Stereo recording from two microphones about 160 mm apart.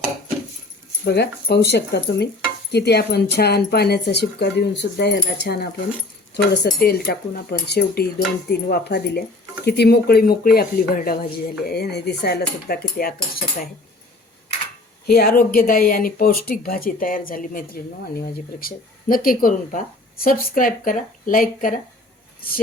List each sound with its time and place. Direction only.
1.0 s speech: 90° left
6.7 s cutlery: 75° left (ahead or behind)
11.6 s speech: 80° left
13.0 s cutlery: 65° left (ahead or behind)
15.0 s speech: 75° left (ahead or behind)